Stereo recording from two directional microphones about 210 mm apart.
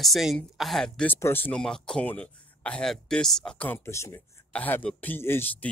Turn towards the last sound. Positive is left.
turn(degrees=10)  # may be behind; listen again after turning